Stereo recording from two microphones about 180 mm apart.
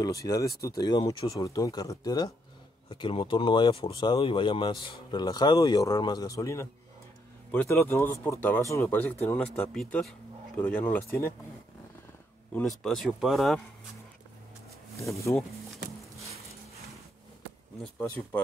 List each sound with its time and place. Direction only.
0.0 s speech: 20° left (ahead or behind)
12.5 s speech: centre (ahead or behind)
17.9 s speech: 10° left (ahead or behind)